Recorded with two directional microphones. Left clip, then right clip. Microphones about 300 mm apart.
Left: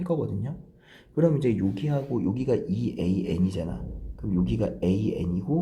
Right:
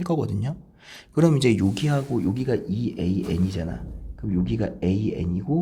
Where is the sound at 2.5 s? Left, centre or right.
Right.